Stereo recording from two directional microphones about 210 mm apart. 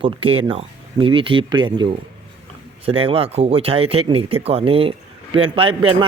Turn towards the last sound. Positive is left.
turn(degrees=-25)  # may be behind; listen again after turning